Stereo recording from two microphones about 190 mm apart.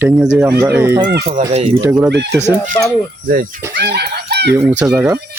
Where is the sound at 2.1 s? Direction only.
65° right (ahead or behind).